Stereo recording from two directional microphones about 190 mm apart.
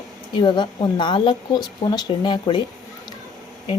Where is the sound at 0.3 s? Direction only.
25° left (ahead or behind).